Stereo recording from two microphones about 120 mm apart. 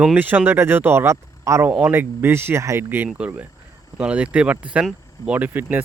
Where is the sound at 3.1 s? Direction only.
10° right (ahead or behind).